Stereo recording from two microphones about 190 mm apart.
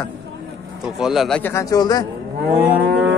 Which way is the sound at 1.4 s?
15° left (ahead or behind).